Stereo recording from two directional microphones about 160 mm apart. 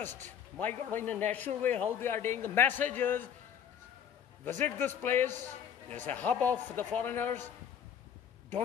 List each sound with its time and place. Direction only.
0.0 s a man's voice: 10° left (ahead or behind)
4.5 s a man's voice: 10° left (ahead or behind)